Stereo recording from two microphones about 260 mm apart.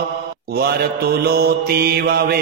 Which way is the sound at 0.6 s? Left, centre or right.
Right.